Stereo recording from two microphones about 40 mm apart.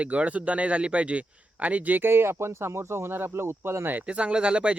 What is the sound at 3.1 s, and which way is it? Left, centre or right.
Speech, right.